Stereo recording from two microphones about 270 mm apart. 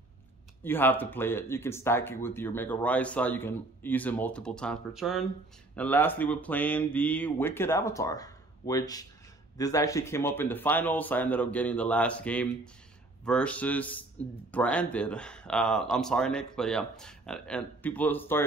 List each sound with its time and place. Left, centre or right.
0.7 s a man's voice: centre